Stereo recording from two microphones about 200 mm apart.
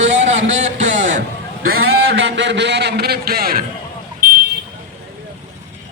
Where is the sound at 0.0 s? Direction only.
35° right (ahead or behind).